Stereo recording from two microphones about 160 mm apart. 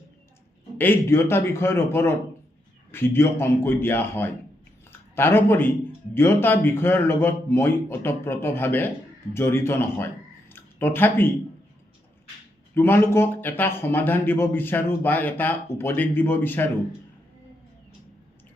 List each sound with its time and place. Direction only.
0.8 s speech: 15° left (ahead or behind)
12.7 s speech: 15° left (ahead or behind)